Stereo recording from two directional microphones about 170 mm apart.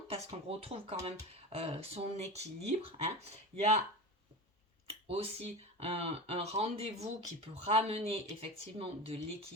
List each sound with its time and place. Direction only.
0.1 s speech: 35° right (ahead or behind)
4.9 s speech: 35° right (ahead or behind)